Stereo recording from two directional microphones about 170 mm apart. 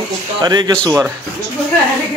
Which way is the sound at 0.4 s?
25° right (ahead or behind).